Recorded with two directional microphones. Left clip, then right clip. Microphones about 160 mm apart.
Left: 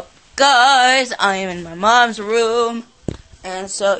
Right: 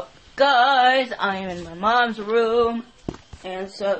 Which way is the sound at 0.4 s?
25° left (ahead or behind).